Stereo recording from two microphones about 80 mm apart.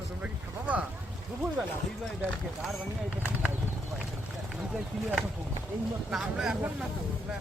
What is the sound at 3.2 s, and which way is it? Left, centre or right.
Speech, right.